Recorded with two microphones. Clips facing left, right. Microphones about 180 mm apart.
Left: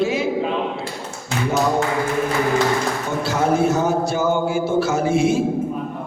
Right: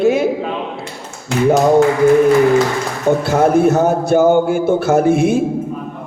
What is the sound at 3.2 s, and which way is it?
A man's voice, 55° right (ahead or behind).